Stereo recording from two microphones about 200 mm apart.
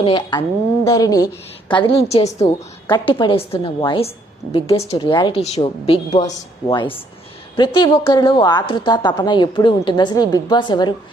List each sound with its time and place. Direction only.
0.0 s a woman's voice: 25° left (ahead or behind)
2.4 s a woman's voice: 10° left (ahead or behind)
3.1 s a woman's voice: 25° left (ahead or behind)